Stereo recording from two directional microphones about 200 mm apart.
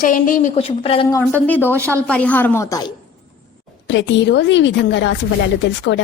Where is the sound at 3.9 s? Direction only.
65° left (ahead or behind).